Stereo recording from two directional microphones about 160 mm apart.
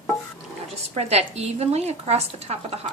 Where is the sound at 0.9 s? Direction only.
45° right (ahead or behind).